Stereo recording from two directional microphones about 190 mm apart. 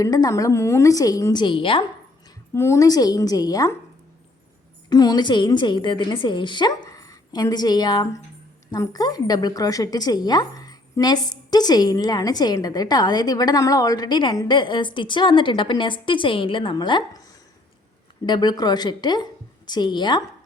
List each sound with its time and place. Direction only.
0.0 s a woman's voice: 20° left (ahead or behind)
2.6 s speech: 15° left (ahead or behind)
4.9 s speech: 20° left (ahead or behind)
18.3 s speech: 20° left (ahead or behind)